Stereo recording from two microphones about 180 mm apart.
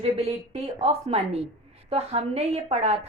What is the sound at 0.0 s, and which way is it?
A woman's voice, 35° right (ahead or behind).